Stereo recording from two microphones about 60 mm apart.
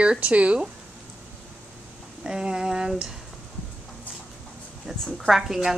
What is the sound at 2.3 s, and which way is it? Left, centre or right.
Speech, centre.